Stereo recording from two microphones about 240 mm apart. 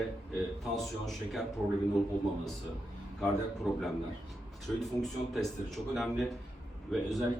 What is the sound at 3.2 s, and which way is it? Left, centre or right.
A man's voice, centre.